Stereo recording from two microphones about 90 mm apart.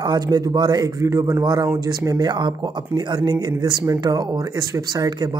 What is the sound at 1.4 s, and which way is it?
Speech, 55° right (ahead or behind).